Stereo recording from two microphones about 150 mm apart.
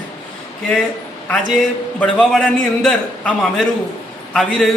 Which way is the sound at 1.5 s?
5° left (ahead or behind).